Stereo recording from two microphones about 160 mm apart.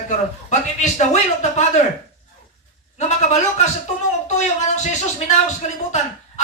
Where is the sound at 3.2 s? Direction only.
45° left (ahead or behind).